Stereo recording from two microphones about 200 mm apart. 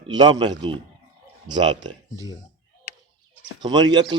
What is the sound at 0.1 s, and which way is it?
A man's voice, 20° right (ahead or behind).